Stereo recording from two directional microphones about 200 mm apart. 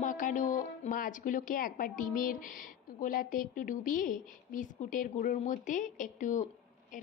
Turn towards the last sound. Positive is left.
turn(degrees=40)  # may be behind; listen again after turning